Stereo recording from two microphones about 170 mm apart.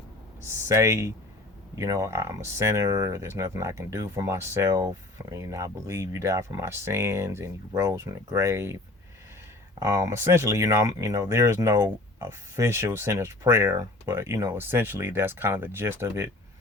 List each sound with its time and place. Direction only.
0.4 s speech: 15° right (ahead or behind)
9.8 s speech: 20° right (ahead or behind)